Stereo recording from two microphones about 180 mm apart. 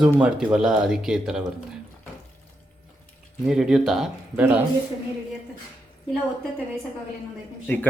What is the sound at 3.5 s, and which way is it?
Speech, 5° right (ahead or behind).